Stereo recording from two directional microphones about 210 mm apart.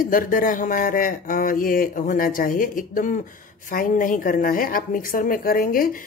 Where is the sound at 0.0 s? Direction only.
40° left (ahead or behind).